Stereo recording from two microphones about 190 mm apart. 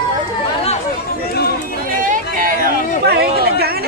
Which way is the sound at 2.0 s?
45° right (ahead or behind).